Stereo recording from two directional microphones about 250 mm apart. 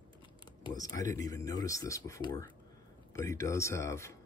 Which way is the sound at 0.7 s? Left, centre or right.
Centre.